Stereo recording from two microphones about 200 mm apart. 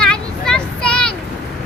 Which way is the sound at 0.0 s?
5° left (ahead or behind).